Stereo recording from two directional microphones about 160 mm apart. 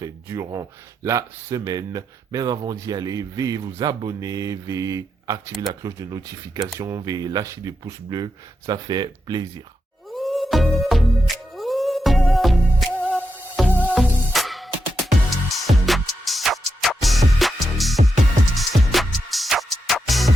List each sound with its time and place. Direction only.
0.0 s speech: 20° right (ahead or behind)
10.1 s music: centre (ahead or behind)
13.1 s music: 5° right (ahead or behind)